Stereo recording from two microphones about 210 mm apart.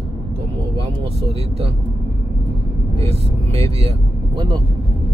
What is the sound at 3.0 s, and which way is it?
Speech, 30° right (ahead or behind).